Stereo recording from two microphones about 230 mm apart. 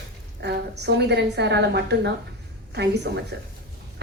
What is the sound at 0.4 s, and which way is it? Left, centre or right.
A woman's voice, right.